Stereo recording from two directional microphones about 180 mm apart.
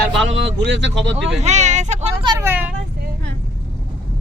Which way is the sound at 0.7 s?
80° right.